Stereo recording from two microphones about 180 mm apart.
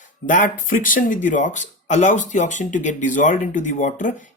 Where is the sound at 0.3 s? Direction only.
45° left (ahead or behind).